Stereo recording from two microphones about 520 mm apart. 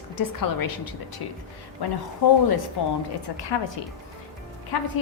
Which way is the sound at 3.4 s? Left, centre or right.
Left.